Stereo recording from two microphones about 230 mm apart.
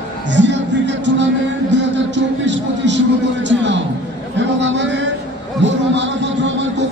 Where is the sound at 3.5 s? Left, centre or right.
Right.